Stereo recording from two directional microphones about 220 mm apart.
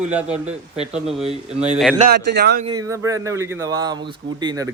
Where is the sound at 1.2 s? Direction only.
30° right (ahead or behind).